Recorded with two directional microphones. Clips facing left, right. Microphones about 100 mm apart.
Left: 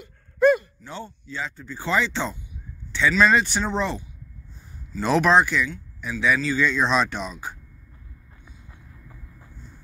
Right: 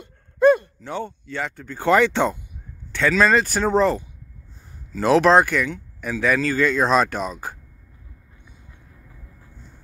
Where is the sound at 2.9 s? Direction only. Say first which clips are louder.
Right 1 dB; 45° right (ahead or behind).